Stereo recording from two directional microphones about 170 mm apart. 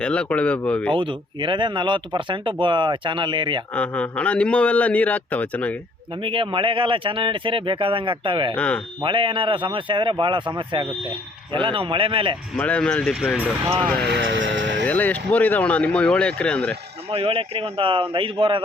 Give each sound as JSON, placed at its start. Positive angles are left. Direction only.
{"t": 0.0, "sound": "a man's voice", "side_deg": 5}
{"t": 0.9, "sound": "speech", "side_deg": -30}
{"t": 3.8, "sound": "a man's voice", "side_deg": 10}
{"t": 6.2, "sound": "speech", "side_deg": -30}
{"t": 8.5, "sound": "a man's voice", "side_deg": 10}
{"t": 9.0, "sound": "speech", "side_deg": -30}
{"t": 12.5, "sound": "a man's voice", "side_deg": 10}
{"t": 14.0, "sound": "speech", "side_deg": -85}
{"t": 14.8, "sound": "a man's voice", "side_deg": 10}
{"t": 17.1, "sound": "speech", "side_deg": -35}